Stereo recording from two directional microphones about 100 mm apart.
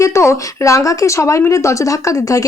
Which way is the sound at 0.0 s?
30° left (ahead or behind).